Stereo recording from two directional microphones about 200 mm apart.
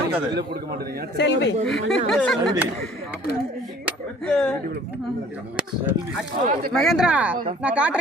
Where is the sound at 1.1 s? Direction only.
60° left (ahead or behind).